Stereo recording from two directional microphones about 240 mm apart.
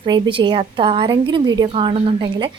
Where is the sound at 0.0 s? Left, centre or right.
Right.